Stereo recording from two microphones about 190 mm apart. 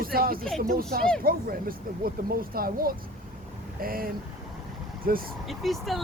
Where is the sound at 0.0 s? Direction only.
50° right (ahead or behind).